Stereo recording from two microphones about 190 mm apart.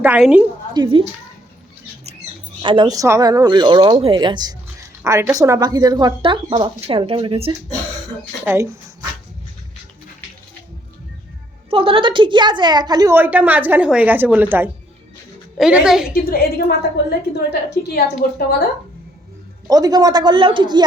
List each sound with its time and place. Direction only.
0.0 s a woman's voice: 5° right (ahead or behind)
0.7 s speech: 25° right (ahead or behind)
2.6 s speech: 25° right (ahead or behind)
8.4 s speech: 15° right (ahead or behind)
11.7 s a woman's voice: 30° right (ahead or behind); by 16.1 s 5° right (ahead or behind)
16.1 s a woman's voice: 50° left (ahead or behind)
19.6 s speech: 20° right (ahead or behind)